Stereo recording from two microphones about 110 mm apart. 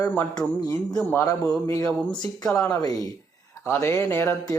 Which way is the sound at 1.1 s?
25° left (ahead or behind).